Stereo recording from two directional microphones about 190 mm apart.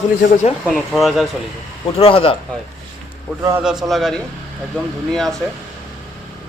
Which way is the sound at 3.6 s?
5° right (ahead or behind).